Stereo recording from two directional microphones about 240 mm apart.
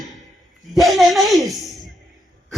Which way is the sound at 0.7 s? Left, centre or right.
Centre.